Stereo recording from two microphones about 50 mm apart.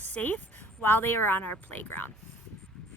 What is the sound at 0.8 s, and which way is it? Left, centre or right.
Speech, left.